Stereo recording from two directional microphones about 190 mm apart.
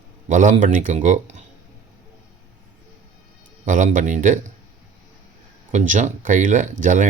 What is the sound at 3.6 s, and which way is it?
Speech, 40° right (ahead or behind).